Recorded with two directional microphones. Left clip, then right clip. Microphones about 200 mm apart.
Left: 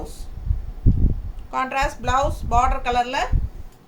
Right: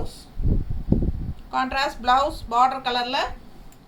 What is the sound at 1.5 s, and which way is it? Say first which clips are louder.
A woman's voice: left 1 dB; 15° left (ahead or behind).